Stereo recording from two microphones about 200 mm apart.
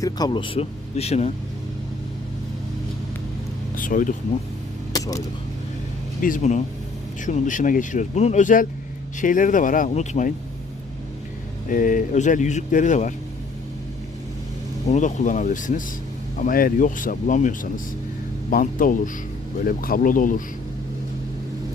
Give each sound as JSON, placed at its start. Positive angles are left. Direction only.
{"t": 0.0, "sound": "speech", "side_deg": 20}
{"t": 3.8, "sound": "speech", "side_deg": 40}
{"t": 4.9, "sound": "a sound", "side_deg": 15}
{"t": 6.2, "sound": "speech", "side_deg": 40}
{"t": 11.7, "sound": "speech", "side_deg": 40}
{"t": 14.8, "sound": "speech", "side_deg": 40}